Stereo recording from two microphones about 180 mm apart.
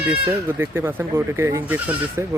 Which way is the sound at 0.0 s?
10° right (ahead or behind).